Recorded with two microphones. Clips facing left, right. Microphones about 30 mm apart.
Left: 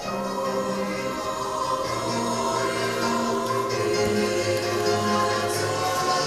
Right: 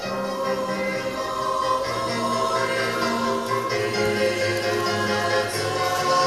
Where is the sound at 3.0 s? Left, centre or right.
Right.